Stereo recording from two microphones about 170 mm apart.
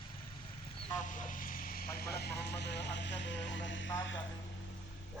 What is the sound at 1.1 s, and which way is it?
Vehicle, 50° left (ahead or behind).